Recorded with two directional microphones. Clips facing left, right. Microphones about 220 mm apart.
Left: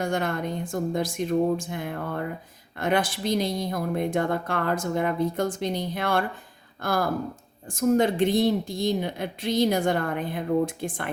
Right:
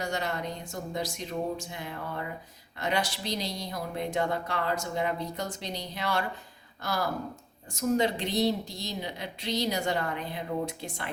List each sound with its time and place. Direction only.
0.0 s speech: 50° left (ahead or behind)